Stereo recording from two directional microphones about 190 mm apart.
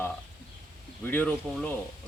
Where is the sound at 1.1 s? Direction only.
10° left (ahead or behind).